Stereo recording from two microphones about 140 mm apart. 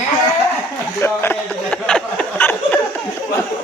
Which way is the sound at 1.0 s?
15° left (ahead or behind).